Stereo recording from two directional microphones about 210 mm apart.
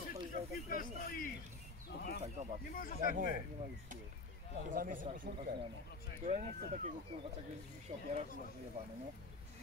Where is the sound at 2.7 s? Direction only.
45° left (ahead or behind).